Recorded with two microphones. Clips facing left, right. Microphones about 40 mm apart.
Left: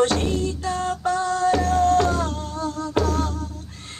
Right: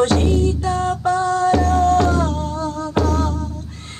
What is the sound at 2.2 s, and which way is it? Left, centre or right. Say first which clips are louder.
Music: right 5 dB; right.